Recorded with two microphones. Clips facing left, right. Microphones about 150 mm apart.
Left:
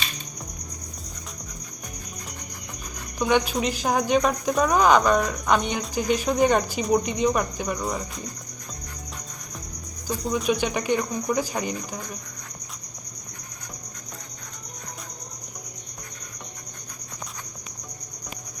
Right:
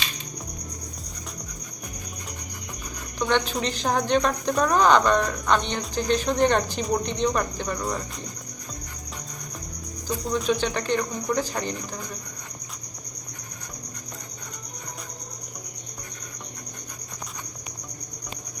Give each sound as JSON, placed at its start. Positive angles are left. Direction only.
{"t": 3.2, "sound": "speech", "side_deg": 10}
{"t": 10.2, "sound": "speech", "side_deg": 10}